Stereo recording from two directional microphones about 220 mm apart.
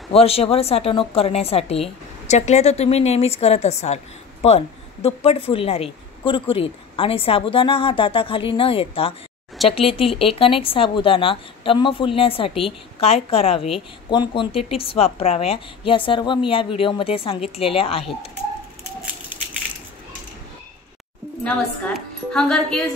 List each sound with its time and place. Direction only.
0.1 s a woman's voice: 25° left (ahead or behind)
21.5 s a woman's voice: 5° left (ahead or behind)